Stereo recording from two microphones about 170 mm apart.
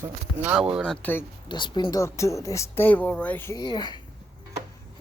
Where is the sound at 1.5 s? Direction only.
25° left (ahead or behind).